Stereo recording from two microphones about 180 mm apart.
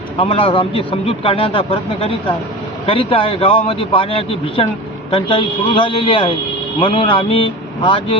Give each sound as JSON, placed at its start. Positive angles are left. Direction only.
{"t": 0.2, "sound": "a man's voice", "side_deg": 30}